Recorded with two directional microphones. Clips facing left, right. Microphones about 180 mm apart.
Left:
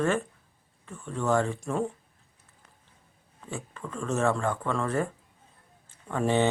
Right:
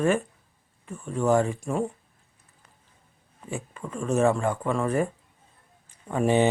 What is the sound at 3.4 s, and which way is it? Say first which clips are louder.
Speech: right 3 dB; 15° right (ahead or behind).